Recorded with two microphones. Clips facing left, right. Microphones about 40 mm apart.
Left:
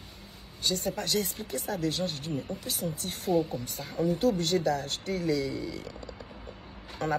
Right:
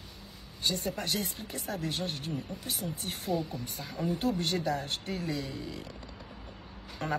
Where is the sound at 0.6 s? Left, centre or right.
Right.